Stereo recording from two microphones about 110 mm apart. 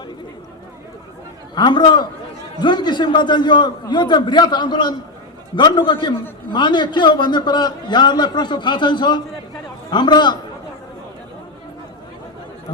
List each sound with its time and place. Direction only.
1.5 s a man's voice: 45° left (ahead or behind)